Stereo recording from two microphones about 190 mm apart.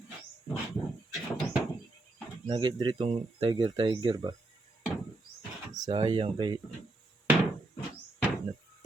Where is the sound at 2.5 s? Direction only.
25° right (ahead or behind).